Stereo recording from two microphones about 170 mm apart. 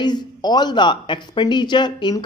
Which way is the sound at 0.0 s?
25° left (ahead or behind).